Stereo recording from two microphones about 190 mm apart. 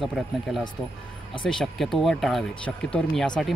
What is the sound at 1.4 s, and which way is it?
Speech, centre (ahead or behind).